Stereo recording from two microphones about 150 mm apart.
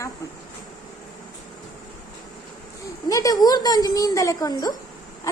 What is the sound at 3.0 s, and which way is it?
A woman's voice, 25° left (ahead or behind).